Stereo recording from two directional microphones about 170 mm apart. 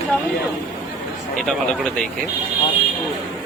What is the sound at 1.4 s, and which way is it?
Speech, centre (ahead or behind).